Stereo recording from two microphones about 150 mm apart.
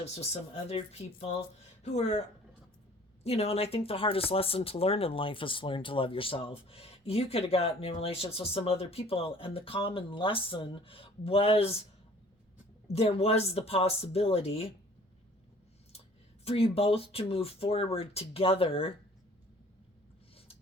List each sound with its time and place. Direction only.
0.0 s speech: 45° left (ahead or behind)
3.2 s speech: 45° left (ahead or behind)
12.9 s speech: 45° left (ahead or behind)
16.4 s speech: 40° left (ahead or behind)